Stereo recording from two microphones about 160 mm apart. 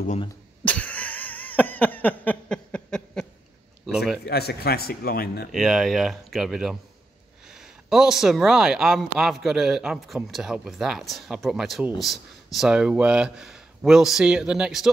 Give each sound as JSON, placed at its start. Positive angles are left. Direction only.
{"t": 0.7, "sound": "a sound", "side_deg": 10}
{"t": 4.3, "sound": "speech", "side_deg": 80}
{"t": 5.5, "sound": "speech", "side_deg": 0}